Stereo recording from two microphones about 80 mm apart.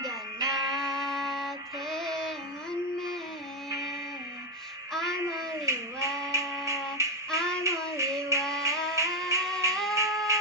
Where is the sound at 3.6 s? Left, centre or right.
Right.